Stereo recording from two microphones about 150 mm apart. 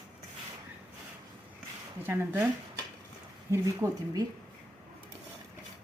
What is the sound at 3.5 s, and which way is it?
Speech, 20° right (ahead or behind).